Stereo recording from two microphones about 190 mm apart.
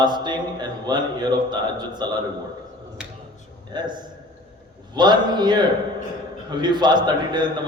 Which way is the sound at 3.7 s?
25° right (ahead or behind).